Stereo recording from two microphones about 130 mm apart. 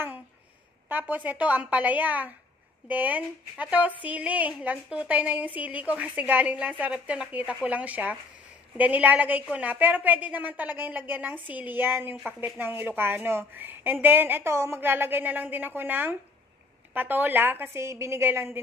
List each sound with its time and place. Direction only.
0.8 s speech: 15° right (ahead or behind)